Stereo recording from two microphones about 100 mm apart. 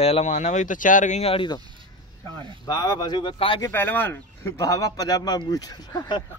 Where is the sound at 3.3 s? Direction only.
60° left (ahead or behind).